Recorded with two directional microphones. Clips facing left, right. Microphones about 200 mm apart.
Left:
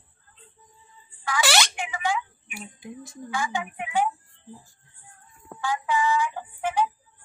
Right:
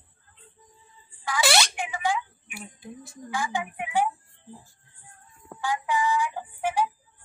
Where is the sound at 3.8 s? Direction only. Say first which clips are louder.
Even; 15° right (ahead or behind).